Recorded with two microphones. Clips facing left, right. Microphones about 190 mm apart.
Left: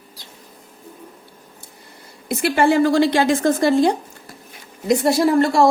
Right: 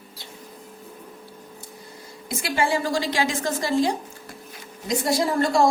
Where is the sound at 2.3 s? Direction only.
60° left (ahead or behind).